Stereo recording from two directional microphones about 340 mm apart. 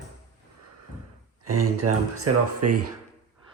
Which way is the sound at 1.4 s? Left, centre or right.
Right.